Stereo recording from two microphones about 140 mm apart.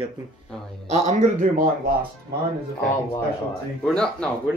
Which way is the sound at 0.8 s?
50° right (ahead or behind).